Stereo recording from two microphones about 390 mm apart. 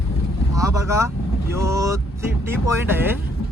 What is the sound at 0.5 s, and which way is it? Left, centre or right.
Vehicle, centre.